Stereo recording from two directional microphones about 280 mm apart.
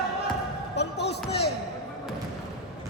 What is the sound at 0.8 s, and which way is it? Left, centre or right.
Basketball bounce, left.